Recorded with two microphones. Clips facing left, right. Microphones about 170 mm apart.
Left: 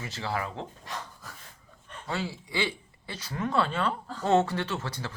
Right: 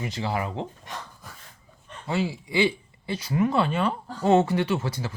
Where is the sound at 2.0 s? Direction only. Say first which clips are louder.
Right 6 dB; 15° right (ahead or behind).